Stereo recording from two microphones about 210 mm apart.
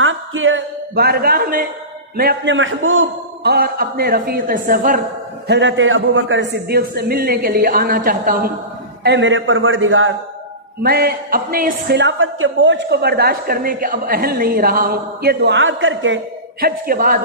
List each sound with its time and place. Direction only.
0.0 s a sound: 65° right (ahead or behind)
0.9 s a woman's voice: 45° right (ahead or behind)
2.5 s a man's voice: 65° right (ahead or behind)
3.4 s a woman's voice: 45° right (ahead or behind)
5.5 s a woman's voice: 60° right (ahead or behind); by 8.5 s 45° right (ahead or behind)
9.0 s a man's voice: 55° right (ahead or behind)
10.8 s a woman's voice: 45° right (ahead or behind); by 16.2 s 65° right (ahead or behind)
16.6 s a woman's voice: 45° right (ahead or behind)